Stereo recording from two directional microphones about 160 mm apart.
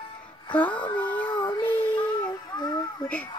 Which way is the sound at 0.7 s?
30° left (ahead or behind).